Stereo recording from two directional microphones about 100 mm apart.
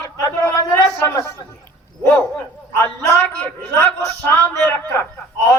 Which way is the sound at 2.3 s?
25° left (ahead or behind).